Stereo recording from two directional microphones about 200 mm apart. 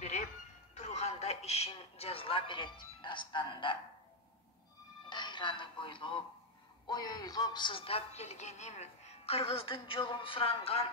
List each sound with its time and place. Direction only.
0.7 s speech: 35° left (ahead or behind)
5.1 s speech: 25° left (ahead or behind)